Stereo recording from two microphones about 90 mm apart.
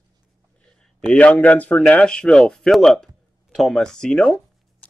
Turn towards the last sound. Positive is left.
turn(degrees=5)  # may be behind; listen again after turning